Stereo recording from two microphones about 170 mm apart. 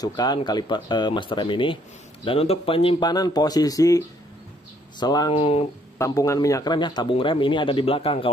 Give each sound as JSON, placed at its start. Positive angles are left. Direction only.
{"t": 0.0, "sound": "speech", "side_deg": 25}
{"t": 5.0, "sound": "speech", "side_deg": 25}
{"t": 5.9, "sound": "speech", "side_deg": 20}